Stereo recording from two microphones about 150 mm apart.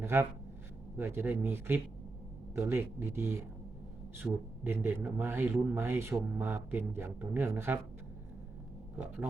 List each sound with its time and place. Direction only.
0.0 s speech: 15° right (ahead or behind)